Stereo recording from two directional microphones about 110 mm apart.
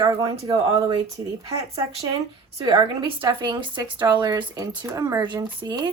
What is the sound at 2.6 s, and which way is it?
A woman's voice, 45° right (ahead or behind).